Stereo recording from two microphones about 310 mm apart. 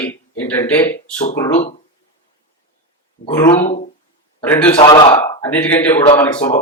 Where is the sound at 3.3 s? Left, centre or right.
Centre.